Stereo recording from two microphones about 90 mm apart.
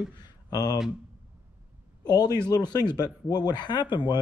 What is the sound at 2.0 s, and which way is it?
Speech, 50° left (ahead or behind).